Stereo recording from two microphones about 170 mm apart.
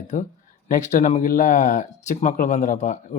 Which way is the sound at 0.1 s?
45° left (ahead or behind).